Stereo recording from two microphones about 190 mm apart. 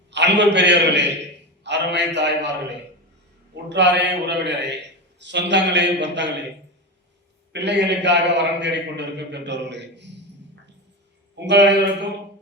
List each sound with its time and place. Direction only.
0.1 s a man's voice: 70° right (ahead or behind)
3.5 s a man's voice: 65° right (ahead or behind)
7.5 s a man's voice: 65° right (ahead or behind)
11.3 s a man's voice: 65° right (ahead or behind)